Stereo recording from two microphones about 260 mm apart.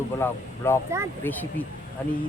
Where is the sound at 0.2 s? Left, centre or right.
Centre.